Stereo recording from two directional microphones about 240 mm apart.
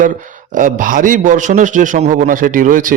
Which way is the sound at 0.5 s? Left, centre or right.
Right.